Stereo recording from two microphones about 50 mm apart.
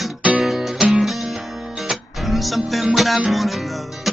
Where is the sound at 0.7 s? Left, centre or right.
Centre.